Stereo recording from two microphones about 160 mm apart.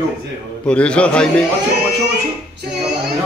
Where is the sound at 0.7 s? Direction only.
5° left (ahead or behind).